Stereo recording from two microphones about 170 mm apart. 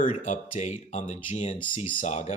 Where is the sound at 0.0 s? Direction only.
45° left (ahead or behind).